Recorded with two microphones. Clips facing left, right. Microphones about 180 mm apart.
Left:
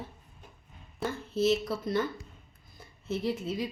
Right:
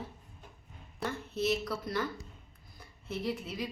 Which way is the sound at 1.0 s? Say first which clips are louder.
Left 3 dB; centre (ahead or behind).